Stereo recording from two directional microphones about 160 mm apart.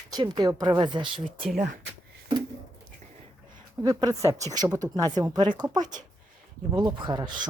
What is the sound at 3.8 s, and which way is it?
Speech, 25° right (ahead or behind).